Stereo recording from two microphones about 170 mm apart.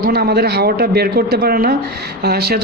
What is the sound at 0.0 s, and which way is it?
A man's voice, 70° right (ahead or behind).